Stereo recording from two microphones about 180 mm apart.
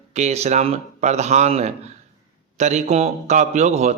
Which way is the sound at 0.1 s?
35° right (ahead or behind).